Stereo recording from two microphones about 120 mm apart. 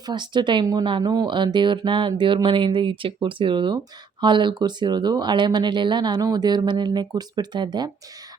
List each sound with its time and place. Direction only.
0.0 s speech: 40° right (ahead or behind)